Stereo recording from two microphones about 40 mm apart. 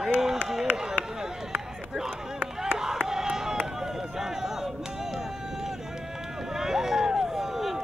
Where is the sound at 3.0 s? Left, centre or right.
Centre.